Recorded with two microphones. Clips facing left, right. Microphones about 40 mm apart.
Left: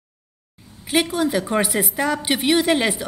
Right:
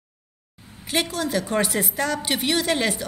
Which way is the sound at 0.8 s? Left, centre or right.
Centre.